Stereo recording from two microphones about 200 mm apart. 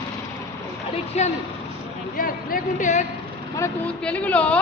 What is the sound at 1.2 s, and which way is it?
Speech, 35° left (ahead or behind).